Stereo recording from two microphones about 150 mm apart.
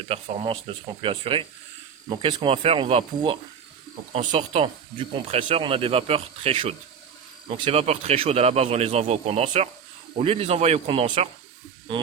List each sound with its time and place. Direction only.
0.1 s a man's voice: 40° right (ahead or behind)